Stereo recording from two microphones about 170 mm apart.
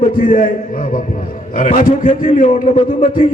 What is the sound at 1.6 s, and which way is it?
A man's voice, 50° left (ahead or behind).